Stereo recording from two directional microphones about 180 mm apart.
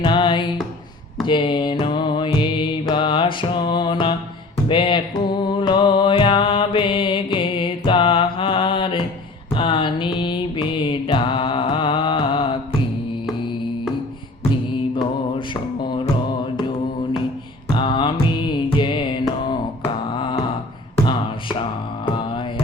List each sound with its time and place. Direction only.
0.0 s music: 25° left (ahead or behind)
9.6 s mantra: 30° left (ahead or behind)
14.9 s music: 25° left (ahead or behind)
17.7 s music: 25° left (ahead or behind)
20.1 s a sound: 30° left (ahead or behind)
22.0 s music: 30° left (ahead or behind)